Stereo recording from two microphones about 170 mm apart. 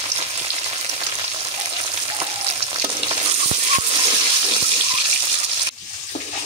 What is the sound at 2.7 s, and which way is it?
Frying, 30° right (ahead or behind).